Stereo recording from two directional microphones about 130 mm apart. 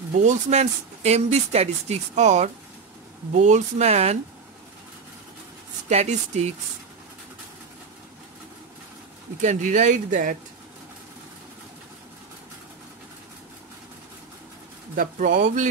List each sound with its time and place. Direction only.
0.1 s speech: 70° right (ahead or behind)
5.9 s speech: 60° right (ahead or behind)
9.4 s speech: 70° right (ahead or behind)
15.0 s speech: 90° right